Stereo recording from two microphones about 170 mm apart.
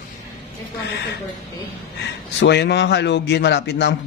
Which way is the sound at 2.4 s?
85° left.